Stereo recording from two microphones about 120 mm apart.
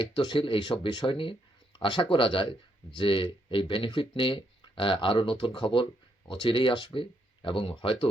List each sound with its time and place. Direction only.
0.0 s speech: 45° left (ahead or behind)